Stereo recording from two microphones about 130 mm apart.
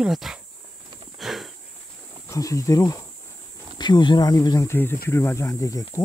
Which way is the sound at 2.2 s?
25° left (ahead or behind).